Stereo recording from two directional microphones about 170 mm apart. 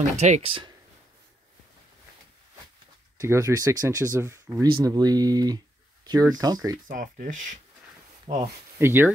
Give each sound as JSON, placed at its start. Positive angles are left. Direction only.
{"t": 0.0, "sound": "speech", "side_deg": -40}
{"t": 3.2, "sound": "speech", "side_deg": -20}
{"t": 6.9, "sound": "speech", "side_deg": -50}
{"t": 8.4, "sound": "speech", "side_deg": -15}